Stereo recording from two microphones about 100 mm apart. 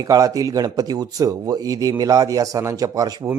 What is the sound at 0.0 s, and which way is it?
Speech, 35° right (ahead or behind).